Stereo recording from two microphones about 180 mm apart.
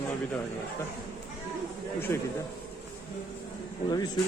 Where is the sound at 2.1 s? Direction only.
15° left (ahead or behind).